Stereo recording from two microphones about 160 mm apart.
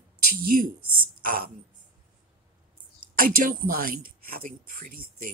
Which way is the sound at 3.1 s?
60° right (ahead or behind).